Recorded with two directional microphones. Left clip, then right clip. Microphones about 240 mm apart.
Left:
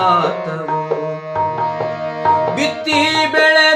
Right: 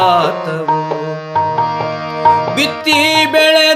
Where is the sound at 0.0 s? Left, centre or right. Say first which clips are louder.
Right 3 dB; right.